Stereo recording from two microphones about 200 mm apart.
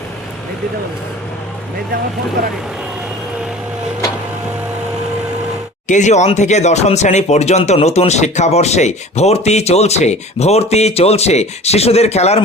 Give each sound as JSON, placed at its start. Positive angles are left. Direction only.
{"t": 5.9, "sound": "speech", "side_deg": 35}